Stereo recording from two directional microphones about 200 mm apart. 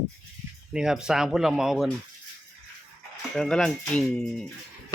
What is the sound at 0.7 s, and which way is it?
Speech, 5° right (ahead or behind).